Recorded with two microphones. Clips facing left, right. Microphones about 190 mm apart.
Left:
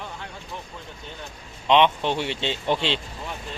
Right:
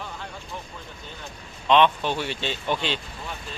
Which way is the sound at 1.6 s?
20° left (ahead or behind).